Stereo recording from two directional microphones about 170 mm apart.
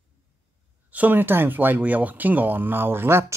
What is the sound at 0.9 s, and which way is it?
Speech, 10° right (ahead or behind).